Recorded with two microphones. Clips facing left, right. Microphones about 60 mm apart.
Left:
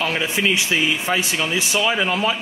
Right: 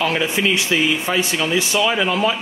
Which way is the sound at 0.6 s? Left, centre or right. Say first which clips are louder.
Right 2 dB; left.